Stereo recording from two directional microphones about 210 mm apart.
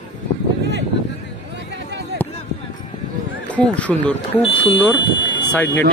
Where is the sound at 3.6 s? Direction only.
5° left (ahead or behind).